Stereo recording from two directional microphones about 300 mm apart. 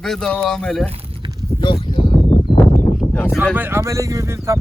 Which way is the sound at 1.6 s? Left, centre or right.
Centre.